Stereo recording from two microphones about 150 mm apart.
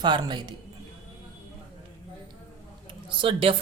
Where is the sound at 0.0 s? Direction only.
30° right (ahead or behind).